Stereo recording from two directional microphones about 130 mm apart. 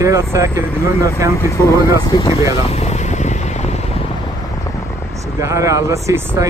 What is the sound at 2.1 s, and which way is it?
Speech, 40° left (ahead or behind).